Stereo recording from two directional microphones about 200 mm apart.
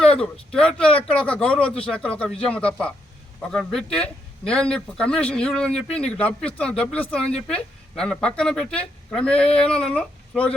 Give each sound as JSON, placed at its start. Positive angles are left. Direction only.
{"t": 0.0, "sound": "a man's voice", "side_deg": 5}